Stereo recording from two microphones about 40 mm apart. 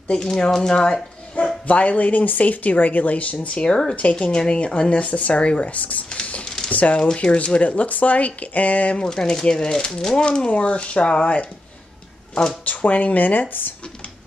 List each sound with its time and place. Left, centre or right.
0.3 s speech: centre
1.4 s bow-wow: left
1.7 s speech: left
3.9 s speech: left
5.7 s speech: left
6.4 s a sound: centre
6.7 s speech: left
8.9 s speech: centre
10.2 s speech: left
12.6 s speech: left